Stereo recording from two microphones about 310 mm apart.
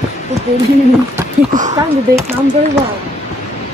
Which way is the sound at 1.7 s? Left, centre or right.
Centre.